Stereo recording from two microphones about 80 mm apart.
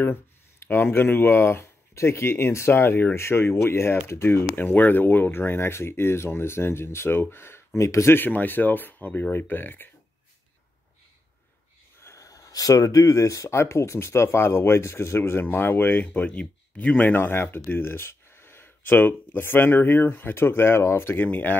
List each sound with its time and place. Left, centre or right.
0.7 s speech: left
12.0 s speech: left